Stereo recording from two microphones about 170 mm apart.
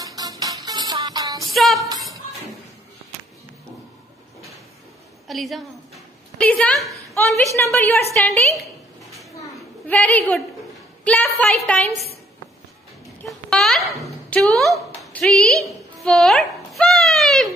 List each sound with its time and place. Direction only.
0.0 s music: 20° right (ahead or behind)
1.5 s music: centre (ahead or behind)
5.3 s a woman's voice: centre (ahead or behind)
7.2 s a woman's voice: 10° left (ahead or behind)
9.8 s a woman's voice: 10° left (ahead or behind)
13.5 s a sound: centre (ahead or behind)
14.0 s speech: centre (ahead or behind)
15.0 s a sound: centre (ahead or behind)